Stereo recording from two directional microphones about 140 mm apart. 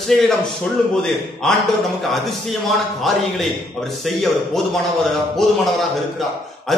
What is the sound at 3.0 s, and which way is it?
Speech, centre (ahead or behind).